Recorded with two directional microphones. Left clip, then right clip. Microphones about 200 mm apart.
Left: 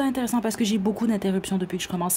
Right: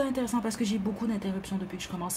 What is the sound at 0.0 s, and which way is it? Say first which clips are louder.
Speech: left 4 dB; 40° left (ahead or behind).